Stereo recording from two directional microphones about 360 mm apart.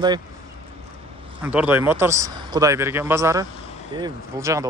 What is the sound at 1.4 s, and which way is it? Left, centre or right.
Speech, centre.